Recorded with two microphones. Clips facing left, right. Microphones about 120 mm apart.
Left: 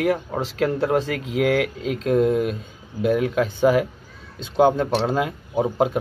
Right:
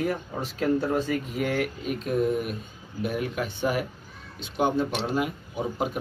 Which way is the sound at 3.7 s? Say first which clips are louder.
Left 9 dB; 90° left.